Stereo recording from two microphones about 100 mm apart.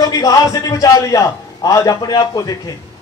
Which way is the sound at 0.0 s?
40° left (ahead or behind).